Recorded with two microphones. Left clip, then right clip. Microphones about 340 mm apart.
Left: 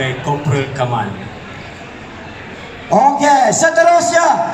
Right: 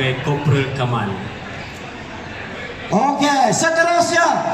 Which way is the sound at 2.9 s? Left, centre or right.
Left.